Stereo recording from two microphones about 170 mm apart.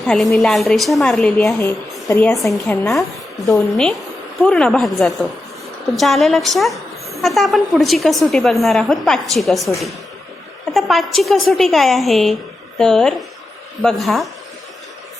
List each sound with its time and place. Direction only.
0.0 s a woman's voice: centre (ahead or behind)
2.0 s speech: 15° left (ahead or behind)
2.6 s a woman's voice: centre (ahead or behind)